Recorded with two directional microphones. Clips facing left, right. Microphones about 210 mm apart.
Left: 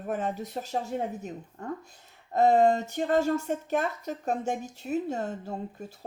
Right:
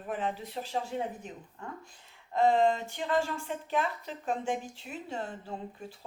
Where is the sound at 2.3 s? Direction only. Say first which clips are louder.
Left 4 dB; 45° left (ahead or behind).